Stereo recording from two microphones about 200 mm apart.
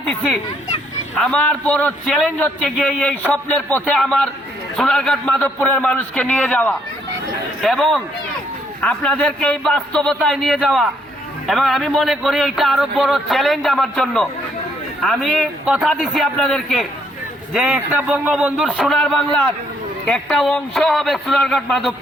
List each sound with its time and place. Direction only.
1.2 s a man's voice: 5° left (ahead or behind)